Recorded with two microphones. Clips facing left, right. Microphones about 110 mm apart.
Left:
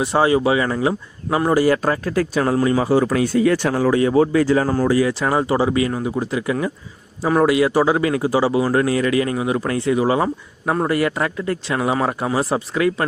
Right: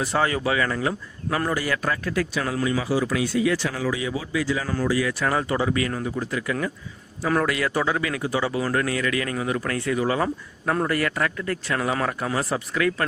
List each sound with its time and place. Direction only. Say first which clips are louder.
0.0 s speech: left 7 dB; 25° left (ahead or behind)
1.5 s speech: left 12 dB; 35° left (ahead or behind)
5.0 s speech: left 5 dB; 25° left (ahead or behind)